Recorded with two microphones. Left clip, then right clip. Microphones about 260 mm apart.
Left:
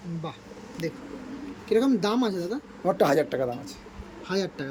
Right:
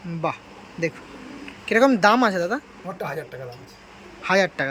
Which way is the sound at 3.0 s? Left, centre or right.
Left.